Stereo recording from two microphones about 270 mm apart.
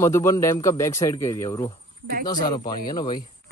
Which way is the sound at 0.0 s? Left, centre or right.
Centre.